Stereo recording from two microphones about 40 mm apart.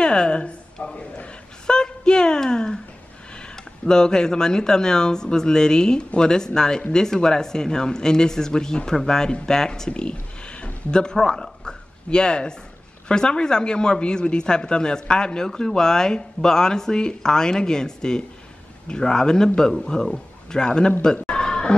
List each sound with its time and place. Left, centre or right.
0.0 s a woman's voice: left
11.6 s a sound: left
13.1 s speech: left
21.0 s chicken: centre